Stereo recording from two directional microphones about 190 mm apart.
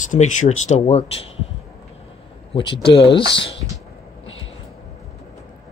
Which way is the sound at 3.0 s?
65° left (ahead or behind).